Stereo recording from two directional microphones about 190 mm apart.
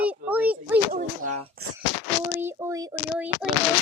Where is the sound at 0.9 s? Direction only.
45° right (ahead or behind).